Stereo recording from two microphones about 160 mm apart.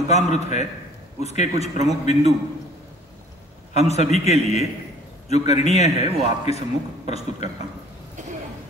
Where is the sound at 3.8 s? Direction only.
40° left (ahead or behind).